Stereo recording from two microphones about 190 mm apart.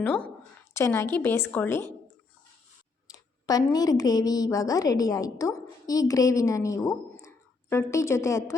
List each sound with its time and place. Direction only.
0.0 s a woman's voice: 10° left (ahead or behind)
3.1 s a woman's voice: 20° left (ahead or behind)